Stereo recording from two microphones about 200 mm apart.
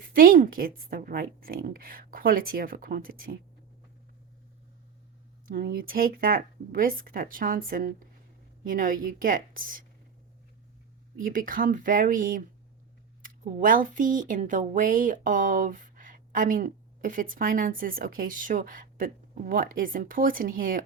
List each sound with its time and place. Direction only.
0.0 s speech: 45° right (ahead or behind)
5.5 s speech: 45° right (ahead or behind)
11.3 s speech: 45° right (ahead or behind)